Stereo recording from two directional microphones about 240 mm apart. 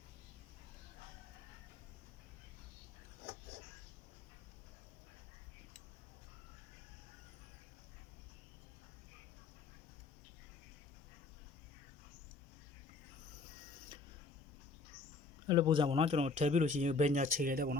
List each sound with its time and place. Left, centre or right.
15.4 s a man's voice: centre; by 17.7 s right